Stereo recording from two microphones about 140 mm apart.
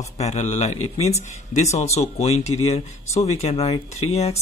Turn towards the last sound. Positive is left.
turn(degrees=50)  # may be behind; listen again after turning